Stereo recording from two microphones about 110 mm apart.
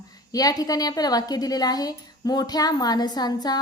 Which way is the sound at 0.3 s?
35° left (ahead or behind).